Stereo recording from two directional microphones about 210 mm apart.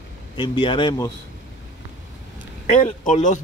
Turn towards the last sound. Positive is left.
turn(degrees=35)  # may be behind; listen again after turning